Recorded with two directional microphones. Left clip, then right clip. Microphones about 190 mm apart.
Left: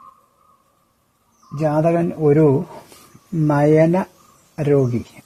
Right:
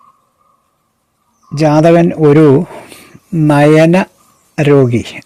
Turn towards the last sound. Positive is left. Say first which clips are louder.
# right 9 dB
turn(degrees=-35)  # may be behind; listen again after turning